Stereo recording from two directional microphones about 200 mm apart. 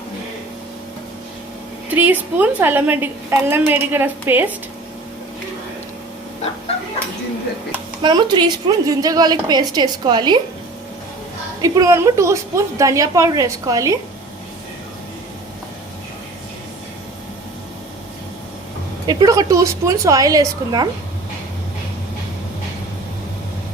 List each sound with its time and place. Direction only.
2.0 s a woman's voice: 10° right (ahead or behind)
8.0 s a woman's voice: 20° right (ahead or behind)
11.6 s a woman's voice: 20° right (ahead or behind)
19.0 s a woman's voice: 20° right (ahead or behind)